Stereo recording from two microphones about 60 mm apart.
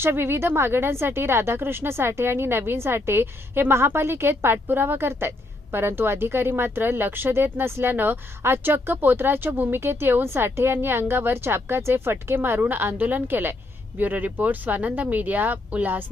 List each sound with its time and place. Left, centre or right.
0.0 s speech: right